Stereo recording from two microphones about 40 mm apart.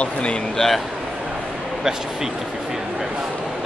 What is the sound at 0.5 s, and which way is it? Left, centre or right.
Speech, centre.